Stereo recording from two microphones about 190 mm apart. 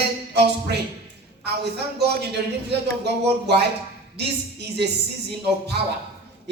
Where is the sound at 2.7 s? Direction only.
60° right (ahead or behind).